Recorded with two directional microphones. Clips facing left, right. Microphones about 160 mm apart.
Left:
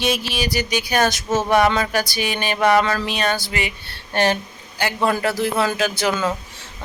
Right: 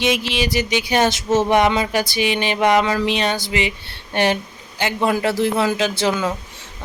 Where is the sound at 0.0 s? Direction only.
20° right (ahead or behind).